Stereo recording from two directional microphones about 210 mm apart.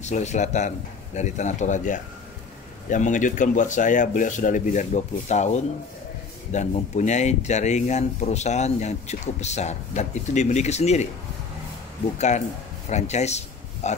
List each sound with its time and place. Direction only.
0.0 s speech: 35° left (ahead or behind)
12.2 s speech: 35° left (ahead or behind)